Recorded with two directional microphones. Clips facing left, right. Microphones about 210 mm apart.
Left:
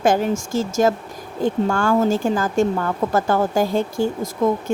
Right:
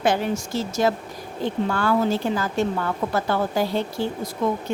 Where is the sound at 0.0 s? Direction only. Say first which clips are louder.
Left 4 dB; 45° left (ahead or behind).